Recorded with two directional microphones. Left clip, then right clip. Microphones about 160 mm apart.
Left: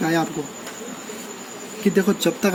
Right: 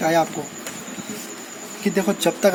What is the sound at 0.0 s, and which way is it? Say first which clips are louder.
Speech: right 3 dB; 15° right (ahead or behind).